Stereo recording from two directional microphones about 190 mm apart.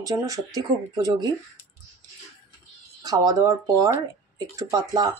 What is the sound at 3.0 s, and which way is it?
Speech, 20° right (ahead or behind).